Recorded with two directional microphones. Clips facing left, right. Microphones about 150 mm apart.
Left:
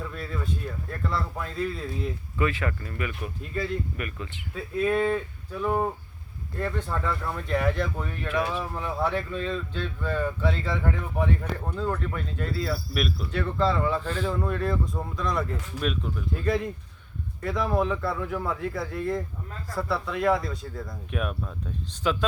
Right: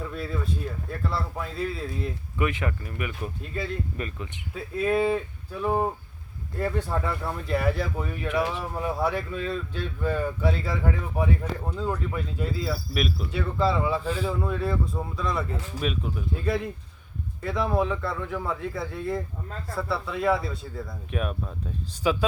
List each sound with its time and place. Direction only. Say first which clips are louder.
0.0 s speech: right 2 dB; centre (ahead or behind)
2.4 s speech: even; 20° right (ahead or behind)
4.8 s speech: right 1 dB; 5° right (ahead or behind)
6.9 s speech: right 2 dB; 15° right (ahead or behind)
7.4 s speech: even; 5° right (ahead or behind)
8.3 s speech: even; 20° right (ahead or behind); by 21.5 s centre (ahead or behind)